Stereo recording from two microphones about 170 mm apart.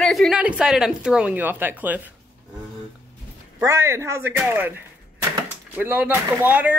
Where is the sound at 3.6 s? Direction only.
15° right (ahead or behind).